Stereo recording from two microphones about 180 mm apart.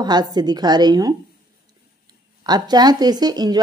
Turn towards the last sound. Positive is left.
turn(degrees=-20)  # may be behind; listen again after turning